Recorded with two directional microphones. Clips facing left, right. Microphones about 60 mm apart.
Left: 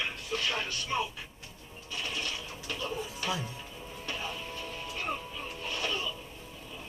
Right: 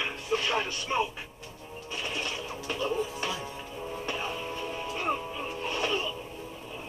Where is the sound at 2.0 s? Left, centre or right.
Right.